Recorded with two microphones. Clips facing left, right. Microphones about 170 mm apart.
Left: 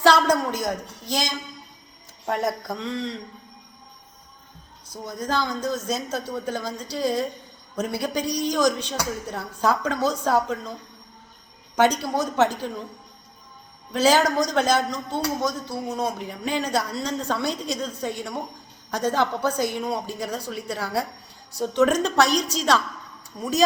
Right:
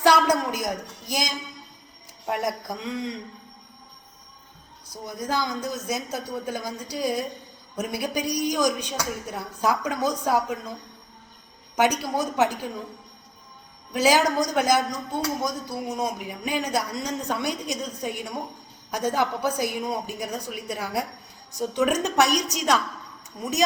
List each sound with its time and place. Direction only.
0.0 s a sound: 15° right (ahead or behind)
2.2 s speech: 15° right (ahead or behind)
5.2 s speech: 15° right (ahead or behind)
11.8 s speech: 15° right (ahead or behind)
13.9 s speech: 15° right (ahead or behind)
19.6 s a woman's voice: 25° left (ahead or behind)
20.1 s speech: 15° right (ahead or behind)
23.4 s speech: 30° left (ahead or behind)